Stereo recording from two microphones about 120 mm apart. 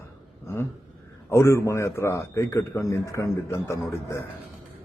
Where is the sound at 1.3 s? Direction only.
20° left (ahead or behind).